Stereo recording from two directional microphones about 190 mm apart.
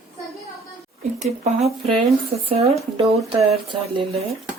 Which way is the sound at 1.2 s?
35° right (ahead or behind).